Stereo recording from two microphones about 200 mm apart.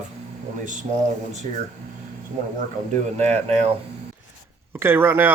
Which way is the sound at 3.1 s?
35° right (ahead or behind).